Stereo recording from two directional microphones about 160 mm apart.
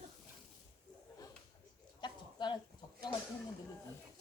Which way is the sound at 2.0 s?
30° left (ahead or behind).